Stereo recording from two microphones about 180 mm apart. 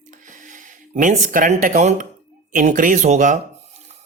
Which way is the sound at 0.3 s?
45° right (ahead or behind).